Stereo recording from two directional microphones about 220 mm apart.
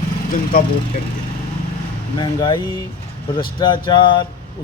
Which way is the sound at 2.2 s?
20° left (ahead or behind).